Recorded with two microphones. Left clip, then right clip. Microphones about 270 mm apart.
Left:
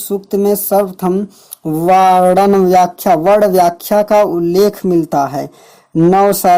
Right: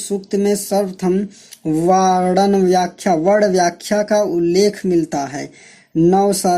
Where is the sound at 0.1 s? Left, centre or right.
Left.